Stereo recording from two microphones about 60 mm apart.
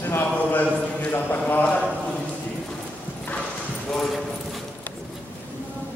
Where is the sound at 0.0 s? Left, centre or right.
Left.